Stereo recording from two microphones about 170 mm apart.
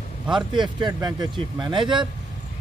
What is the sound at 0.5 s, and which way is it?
Speech, 25° right (ahead or behind).